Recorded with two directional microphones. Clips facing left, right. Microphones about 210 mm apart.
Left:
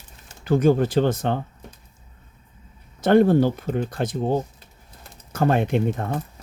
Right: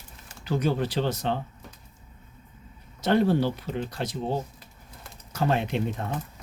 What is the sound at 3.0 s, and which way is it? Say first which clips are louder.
Speech: left 6 dB; 50° left (ahead or behind).